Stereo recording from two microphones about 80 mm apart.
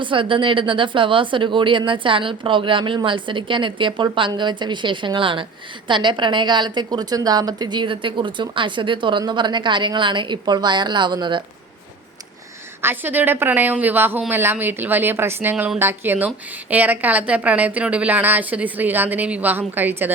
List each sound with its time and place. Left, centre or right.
0.0 s a woman's voice: right
9.2 s a woman's voice: right
12.8 s a woman's voice: right